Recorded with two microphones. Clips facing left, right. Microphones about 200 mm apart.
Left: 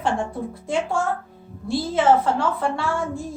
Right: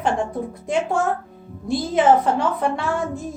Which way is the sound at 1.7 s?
15° right (ahead or behind).